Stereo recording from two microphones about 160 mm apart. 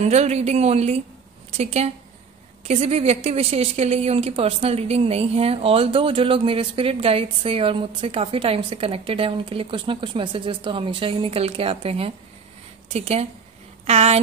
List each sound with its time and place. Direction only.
0.1 s a woman's voice: 40° right (ahead or behind)